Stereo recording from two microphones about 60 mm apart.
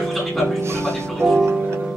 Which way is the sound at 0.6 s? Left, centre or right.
Right.